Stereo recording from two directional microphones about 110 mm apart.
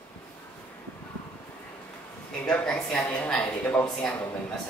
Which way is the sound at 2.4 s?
10° left (ahead or behind).